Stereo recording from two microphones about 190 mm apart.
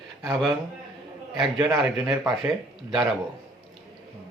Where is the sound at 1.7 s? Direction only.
Centre (ahead or behind).